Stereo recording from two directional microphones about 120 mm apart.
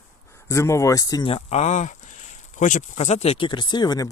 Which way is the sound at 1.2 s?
60° left (ahead or behind).